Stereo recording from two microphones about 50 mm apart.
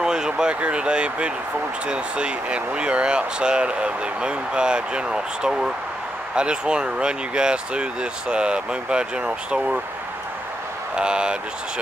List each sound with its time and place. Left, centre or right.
0.0 s a sound: centre
0.6 s speech: right
11.0 s speech: centre